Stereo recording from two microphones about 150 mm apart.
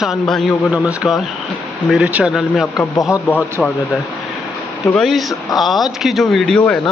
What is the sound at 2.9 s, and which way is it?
Speech, 20° left (ahead or behind).